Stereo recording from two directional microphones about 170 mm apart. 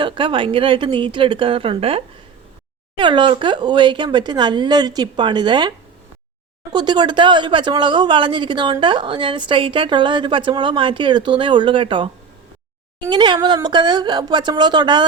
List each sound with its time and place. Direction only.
0.0 s a woman's voice: 30° right (ahead or behind)
6.7 s a woman's voice: 25° right (ahead or behind)